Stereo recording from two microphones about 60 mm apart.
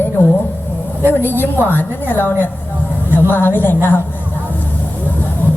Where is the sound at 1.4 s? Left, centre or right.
Left.